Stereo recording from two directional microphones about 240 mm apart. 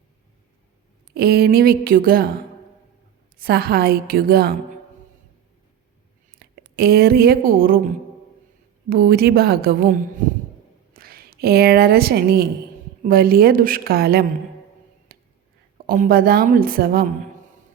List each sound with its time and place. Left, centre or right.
1.1 s a woman's voice: right
3.3 s a woman's voice: right
6.3 s a woman's voice: right
8.9 s a woman's voice: right
15.1 s a sound: right
15.9 s a woman's voice: right